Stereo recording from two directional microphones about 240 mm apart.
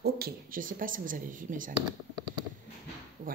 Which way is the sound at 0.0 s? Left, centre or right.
Right.